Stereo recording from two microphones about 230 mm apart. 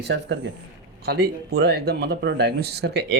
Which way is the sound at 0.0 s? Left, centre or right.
Right.